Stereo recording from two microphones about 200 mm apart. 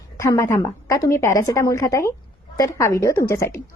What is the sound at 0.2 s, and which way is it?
A woman's voice, 15° left (ahead or behind).